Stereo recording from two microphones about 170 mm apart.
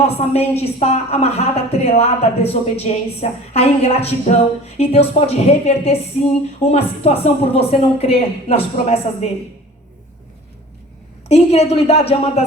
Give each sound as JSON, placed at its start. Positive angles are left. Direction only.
{"t": 0.0, "sound": "a woman's voice", "side_deg": 35}
{"t": 11.3, "sound": "a woman's voice", "side_deg": 40}